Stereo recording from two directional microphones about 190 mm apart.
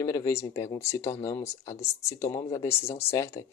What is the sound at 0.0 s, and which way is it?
Speech, 15° left (ahead or behind).